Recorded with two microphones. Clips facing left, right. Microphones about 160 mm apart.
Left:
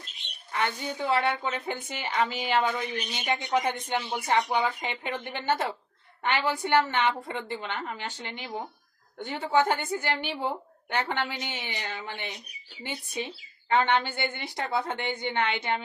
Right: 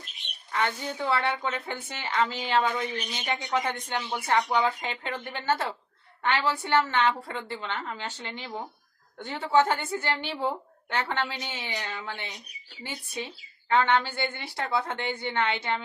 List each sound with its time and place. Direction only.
0.5 s speech: 10° left (ahead or behind)